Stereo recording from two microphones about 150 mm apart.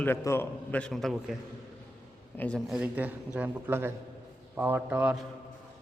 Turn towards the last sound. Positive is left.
turn(degrees=-10)  # may be behind; listen again after turning